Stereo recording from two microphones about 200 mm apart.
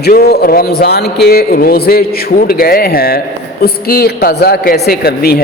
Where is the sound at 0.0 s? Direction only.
50° left (ahead or behind).